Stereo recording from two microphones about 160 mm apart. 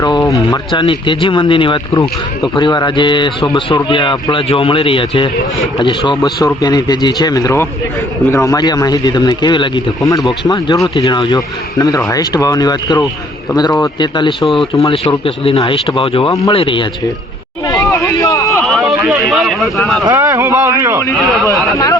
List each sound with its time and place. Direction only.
0.0 s a sound: 25° left (ahead or behind)
0.5 s speech: 25° left (ahead or behind)
18.0 s a sound: 20° left (ahead or behind)
18.6 s speech: centre (ahead or behind)
20.1 s speech: 20° right (ahead or behind)
21.5 s speech: 20° left (ahead or behind)